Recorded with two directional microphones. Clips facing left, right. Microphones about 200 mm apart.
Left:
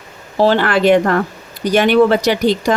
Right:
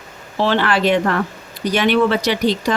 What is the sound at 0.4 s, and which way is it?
Speech, 45° left (ahead or behind).